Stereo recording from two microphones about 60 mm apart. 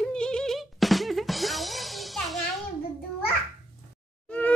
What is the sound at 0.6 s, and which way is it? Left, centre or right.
Music, centre.